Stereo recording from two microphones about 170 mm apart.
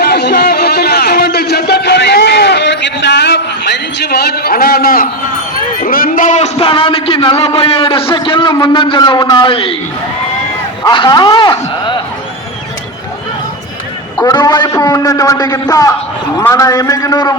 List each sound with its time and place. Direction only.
0.0 s a sound: 75° left (ahead or behind); by 5.0 s 55° left (ahead or behind)
5.8 s a man's voice: 55° left (ahead or behind); by 9.7 s 35° left (ahead or behind)
10.8 s a man's voice: 25° left (ahead or behind)
14.2 s a man's voice: 25° left (ahead or behind)